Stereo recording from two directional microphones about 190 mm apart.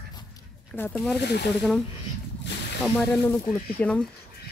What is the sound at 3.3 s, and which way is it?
Speech, 10° left (ahead or behind).